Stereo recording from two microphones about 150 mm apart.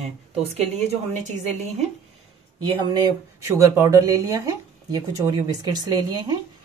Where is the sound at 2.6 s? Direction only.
25° right (ahead or behind).